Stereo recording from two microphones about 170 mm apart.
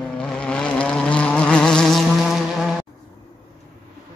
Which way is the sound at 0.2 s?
5° left (ahead or behind).